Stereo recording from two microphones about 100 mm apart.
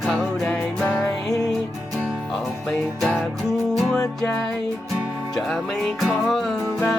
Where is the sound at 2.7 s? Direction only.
5° left (ahead or behind).